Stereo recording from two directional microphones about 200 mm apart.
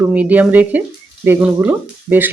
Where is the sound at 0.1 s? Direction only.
5° right (ahead or behind).